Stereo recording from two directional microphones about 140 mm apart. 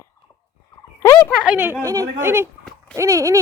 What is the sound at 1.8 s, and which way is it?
Speech, 25° right (ahead or behind).